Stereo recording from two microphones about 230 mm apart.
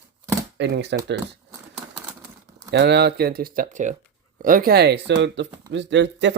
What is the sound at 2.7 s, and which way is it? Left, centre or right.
Speech, right.